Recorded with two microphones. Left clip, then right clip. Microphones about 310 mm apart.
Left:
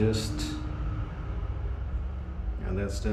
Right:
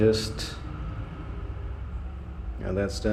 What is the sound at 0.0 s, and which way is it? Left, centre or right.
Speech, centre.